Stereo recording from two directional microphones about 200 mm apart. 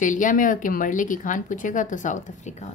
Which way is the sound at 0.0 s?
40° left (ahead or behind).